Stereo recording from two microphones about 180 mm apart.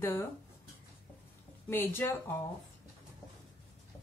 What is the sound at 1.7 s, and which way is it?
Speech, 10° left (ahead or behind).